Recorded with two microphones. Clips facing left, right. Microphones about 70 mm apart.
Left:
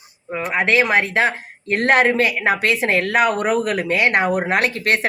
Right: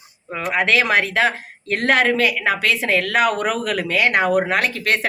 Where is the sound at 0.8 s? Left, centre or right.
Left.